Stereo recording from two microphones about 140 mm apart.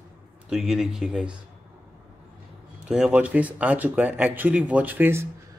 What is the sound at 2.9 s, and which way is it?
Speech, 5° right (ahead or behind).